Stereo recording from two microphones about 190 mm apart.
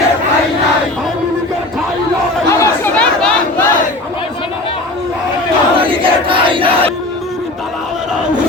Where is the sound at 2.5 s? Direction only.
15° left (ahead or behind).